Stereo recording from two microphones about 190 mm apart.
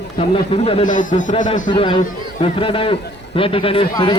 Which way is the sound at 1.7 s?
25° left (ahead or behind).